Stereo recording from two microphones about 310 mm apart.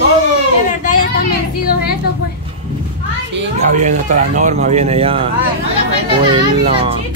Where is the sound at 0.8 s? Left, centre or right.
Left.